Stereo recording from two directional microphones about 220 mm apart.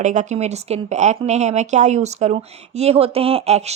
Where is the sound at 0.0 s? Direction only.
35° right (ahead or behind).